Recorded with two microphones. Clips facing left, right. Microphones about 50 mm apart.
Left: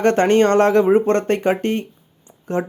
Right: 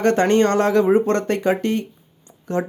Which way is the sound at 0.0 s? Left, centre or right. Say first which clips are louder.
Left 2 dB; left.